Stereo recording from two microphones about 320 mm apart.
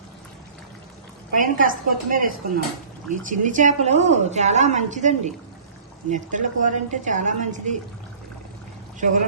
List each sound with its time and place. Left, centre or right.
1.3 s a woman's voice: right
9.0 s speech: right